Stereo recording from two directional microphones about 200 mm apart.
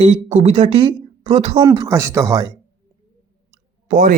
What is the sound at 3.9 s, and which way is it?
Speech, 40° right (ahead or behind).